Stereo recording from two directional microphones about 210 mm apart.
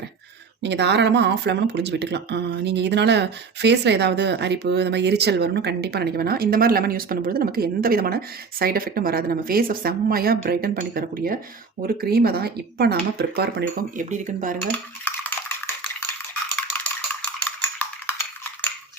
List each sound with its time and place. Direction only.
0.6 s speech: 55° right (ahead or behind); by 14.5 s 35° right (ahead or behind)
14.7 s cutlery: 10° left (ahead or behind)
17.4 s a sound: 10° left (ahead or behind)